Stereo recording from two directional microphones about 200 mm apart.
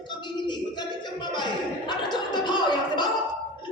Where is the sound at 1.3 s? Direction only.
20° left (ahead or behind).